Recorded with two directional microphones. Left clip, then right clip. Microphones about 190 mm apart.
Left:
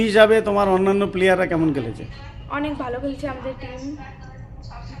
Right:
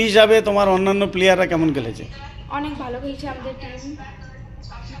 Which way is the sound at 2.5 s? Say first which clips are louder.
Left 1 dB; 20° left (ahead or behind).